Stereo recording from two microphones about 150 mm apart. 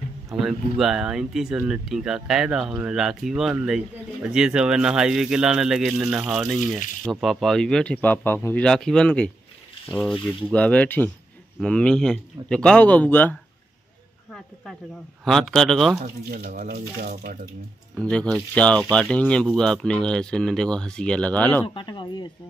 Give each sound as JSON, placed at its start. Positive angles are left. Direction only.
{"t": 0.4, "sound": "speech", "side_deg": 0}
{"t": 8.6, "sound": "speech", "side_deg": 5}
{"t": 15.2, "sound": "speech", "side_deg": 0}
{"t": 16.3, "sound": "speech", "side_deg": -70}
{"t": 18.1, "sound": "speech", "side_deg": 5}
{"t": 21.6, "sound": "speech", "side_deg": 30}